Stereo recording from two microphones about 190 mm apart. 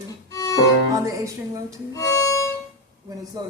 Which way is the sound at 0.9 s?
15° right (ahead or behind).